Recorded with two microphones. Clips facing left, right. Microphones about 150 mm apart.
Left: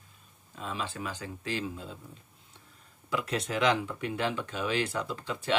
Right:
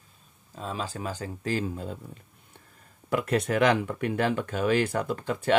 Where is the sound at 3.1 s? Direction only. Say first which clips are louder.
Right 6 dB; 55° right (ahead or behind).